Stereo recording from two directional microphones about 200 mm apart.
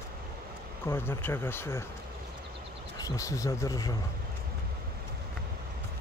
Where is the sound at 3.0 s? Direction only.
15° left (ahead or behind).